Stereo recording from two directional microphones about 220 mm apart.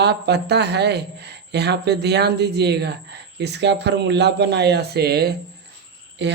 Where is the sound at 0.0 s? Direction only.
50° right (ahead or behind).